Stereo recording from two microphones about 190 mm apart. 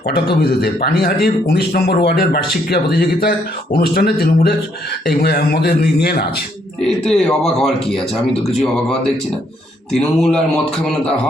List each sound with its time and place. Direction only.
0.1 s speech: 50° left (ahead or behind)
6.8 s a man's voice: 5° left (ahead or behind)